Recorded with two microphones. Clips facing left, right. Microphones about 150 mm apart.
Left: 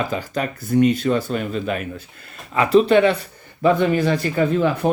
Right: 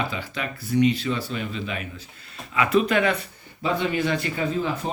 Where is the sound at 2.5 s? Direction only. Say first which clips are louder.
Left 6 dB; 35° left (ahead or behind).